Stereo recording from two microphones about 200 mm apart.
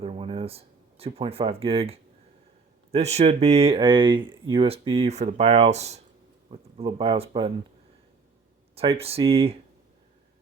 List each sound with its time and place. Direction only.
0.0 s speech: 30° right (ahead or behind)
8.7 s speech: 30° right (ahead or behind)